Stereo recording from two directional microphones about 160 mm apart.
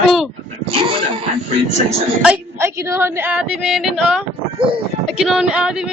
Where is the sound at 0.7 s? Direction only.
35° right (ahead or behind).